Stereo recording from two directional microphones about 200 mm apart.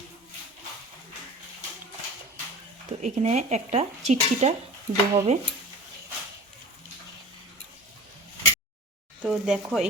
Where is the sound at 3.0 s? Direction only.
35° right (ahead or behind).